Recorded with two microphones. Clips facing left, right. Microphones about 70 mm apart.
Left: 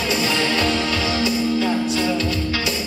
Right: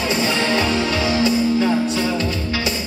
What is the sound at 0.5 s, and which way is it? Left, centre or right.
Music, right.